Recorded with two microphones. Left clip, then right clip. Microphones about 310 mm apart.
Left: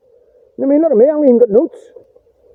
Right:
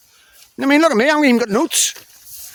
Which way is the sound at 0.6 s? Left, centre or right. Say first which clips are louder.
Left 3 dB; centre.